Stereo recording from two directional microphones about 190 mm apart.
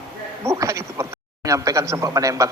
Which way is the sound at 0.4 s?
15° right (ahead or behind).